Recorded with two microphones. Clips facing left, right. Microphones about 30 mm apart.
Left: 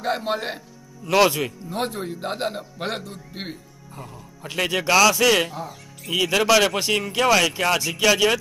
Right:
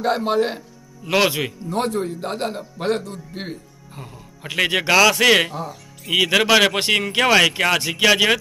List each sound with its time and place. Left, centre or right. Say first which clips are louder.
0.0 s a man's voice: right 5 dB; centre
1.8 s speech: right 4 dB; centre
3.9 s music: even; right
4.6 s speech: right 2 dB; right
5.4 s speech: right 3 dB; right
6.1 s speech: right 3 dB; right